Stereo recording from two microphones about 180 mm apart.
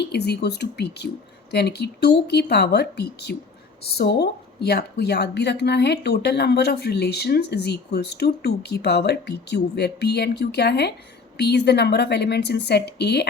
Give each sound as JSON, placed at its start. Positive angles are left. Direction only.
{"t": 0.0, "sound": "a woman's voice", "side_deg": 65}